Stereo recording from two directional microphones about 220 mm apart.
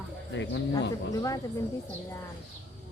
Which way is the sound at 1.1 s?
15° left (ahead or behind).